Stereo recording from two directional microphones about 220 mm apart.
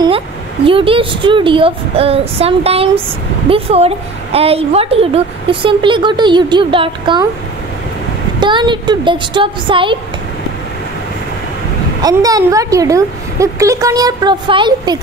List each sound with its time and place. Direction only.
0.7 s a woman's voice: 25° right (ahead or behind)
8.4 s a woman's voice: 20° right (ahead or behind)
12.0 s a woman's voice: 15° right (ahead or behind)